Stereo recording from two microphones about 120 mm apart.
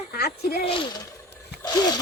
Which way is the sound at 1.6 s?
35° left (ahead or behind).